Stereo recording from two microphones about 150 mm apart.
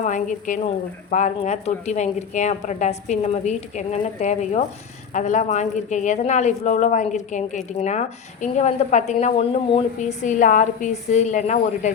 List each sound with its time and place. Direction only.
0.0 s a woman's voice: 55° left (ahead or behind)
9.2 s speech: 40° left (ahead or behind)
10.0 s a woman's voice: 55° left (ahead or behind)